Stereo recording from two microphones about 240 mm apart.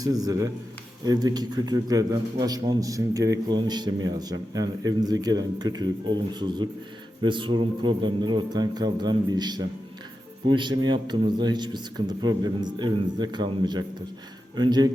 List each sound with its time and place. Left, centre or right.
0.0 s a man's voice: centre